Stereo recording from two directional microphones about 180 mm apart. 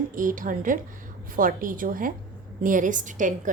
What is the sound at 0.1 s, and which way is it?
A woman's voice, 50° right (ahead or behind).